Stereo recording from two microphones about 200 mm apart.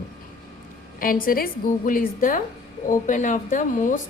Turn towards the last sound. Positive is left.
turn(degrees=40)  # may be behind; listen again after turning